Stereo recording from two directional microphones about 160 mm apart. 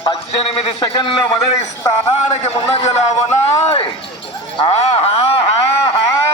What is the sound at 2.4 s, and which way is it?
Speech, 40° left (ahead or behind).